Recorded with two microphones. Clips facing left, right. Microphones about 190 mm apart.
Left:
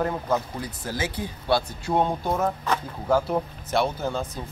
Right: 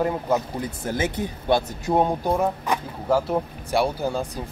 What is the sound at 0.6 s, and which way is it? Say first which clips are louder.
Speech: right 4 dB; 25° right (ahead or behind).